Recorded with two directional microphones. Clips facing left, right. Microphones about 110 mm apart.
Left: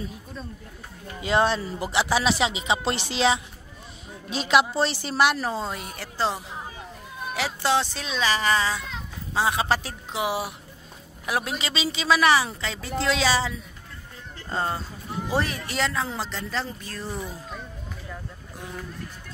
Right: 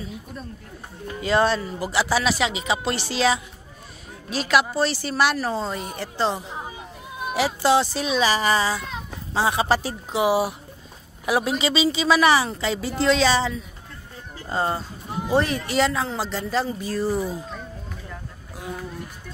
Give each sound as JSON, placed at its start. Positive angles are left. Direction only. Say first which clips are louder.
{"t": 1.2, "sound": "speech", "louder": "right 2 dB", "side_deg": 15}
{"t": 5.5, "sound": "speech", "louder": "right 3 dB", "side_deg": 5}
{"t": 14.5, "sound": "speech", "louder": "right 3 dB", "side_deg": -5}